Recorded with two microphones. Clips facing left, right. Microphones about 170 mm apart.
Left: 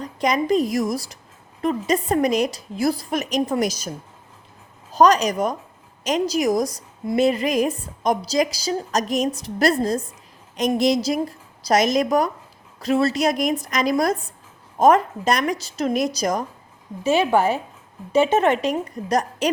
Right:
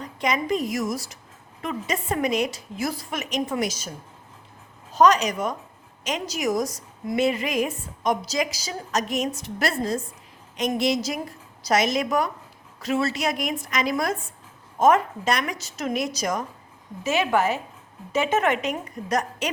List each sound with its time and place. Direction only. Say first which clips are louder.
0.0 s a woman's voice: left 4 dB; 40° left (ahead or behind)
4.9 s a woman's voice: left 3 dB; 35° left (ahead or behind)